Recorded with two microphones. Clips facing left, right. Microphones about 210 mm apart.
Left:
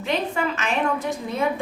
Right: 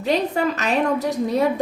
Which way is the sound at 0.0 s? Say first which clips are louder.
Right 4 dB; 40° right (ahead or behind).